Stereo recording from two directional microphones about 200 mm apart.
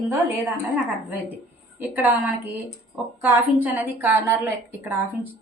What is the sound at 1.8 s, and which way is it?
A woman's voice, 10° right (ahead or behind).